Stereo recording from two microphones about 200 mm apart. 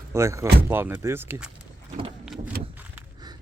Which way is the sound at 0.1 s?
15° right (ahead or behind).